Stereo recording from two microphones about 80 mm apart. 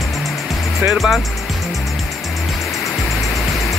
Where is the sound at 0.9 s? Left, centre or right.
Centre.